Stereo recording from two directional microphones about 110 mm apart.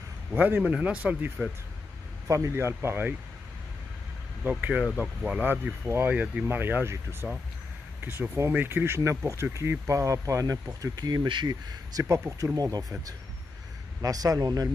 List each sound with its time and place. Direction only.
0.3 s a man's voice: 15° right (ahead or behind)
2.2 s speech: 25° right (ahead or behind)
4.4 s a man's voice: 15° right (ahead or behind); by 12.8 s 30° right (ahead or behind)
14.0 s speech: 35° right (ahead or behind)